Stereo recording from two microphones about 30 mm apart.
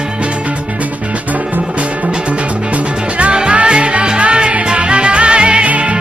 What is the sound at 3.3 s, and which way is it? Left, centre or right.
Music, right.